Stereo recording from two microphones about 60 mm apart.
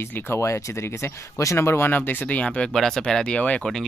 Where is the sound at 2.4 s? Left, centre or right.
Centre.